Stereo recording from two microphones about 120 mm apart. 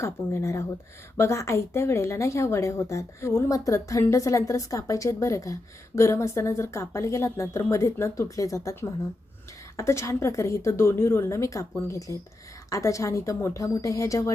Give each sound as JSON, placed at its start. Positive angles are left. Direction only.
{"t": 0.0, "sound": "a woman's voice", "side_deg": 25}